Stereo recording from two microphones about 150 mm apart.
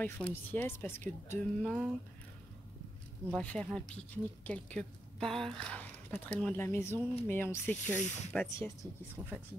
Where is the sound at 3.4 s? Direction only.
10° left (ahead or behind).